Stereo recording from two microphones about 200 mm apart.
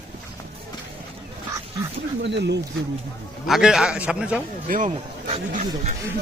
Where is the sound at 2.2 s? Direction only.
60° right (ahead or behind).